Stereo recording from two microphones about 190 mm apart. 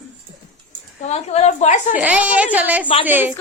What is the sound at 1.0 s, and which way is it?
Speech, 35° left (ahead or behind).